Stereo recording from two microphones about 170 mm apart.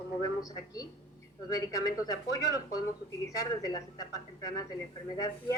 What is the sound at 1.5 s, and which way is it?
Speech, 20° left (ahead or behind).